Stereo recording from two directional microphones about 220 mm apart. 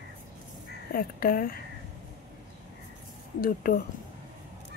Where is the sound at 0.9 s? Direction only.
40° left (ahead or behind).